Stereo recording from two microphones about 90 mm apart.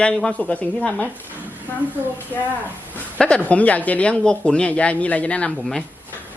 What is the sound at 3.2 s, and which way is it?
Speech, 10° left (ahead or behind).